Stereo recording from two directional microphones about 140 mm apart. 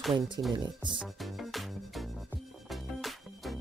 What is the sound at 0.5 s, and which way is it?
Speech, 35° right (ahead or behind).